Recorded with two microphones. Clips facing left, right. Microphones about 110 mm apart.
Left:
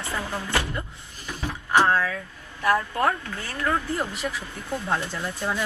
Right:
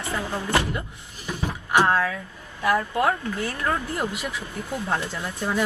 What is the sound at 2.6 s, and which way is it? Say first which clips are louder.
Speech: right 1 dB; 20° right (ahead or behind).